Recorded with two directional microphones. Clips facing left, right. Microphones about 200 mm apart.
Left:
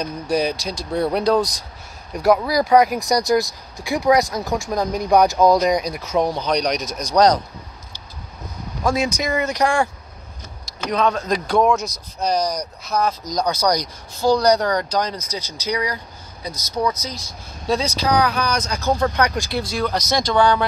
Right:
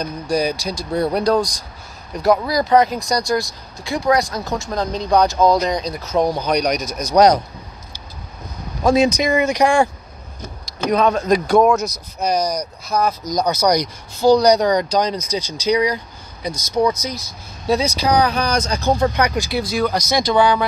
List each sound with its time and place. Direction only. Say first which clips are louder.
0.0 s speech: right 1 dB; centre (ahead or behind)
6.3 s speech: right 2 dB; 5° right (ahead or behind)
8.8 s speech: right 6 dB; 20° right (ahead or behind)
10.9 s speech: right 4 dB; 10° right (ahead or behind)
11.6 s speech: right 3 dB; centre (ahead or behind); by 18.9 s 25° right (ahead or behind)
18.9 s speech: right 2 dB; 10° right (ahead or behind)